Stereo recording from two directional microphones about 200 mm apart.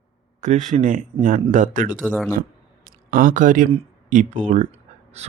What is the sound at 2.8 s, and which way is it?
Speech, 40° right (ahead or behind).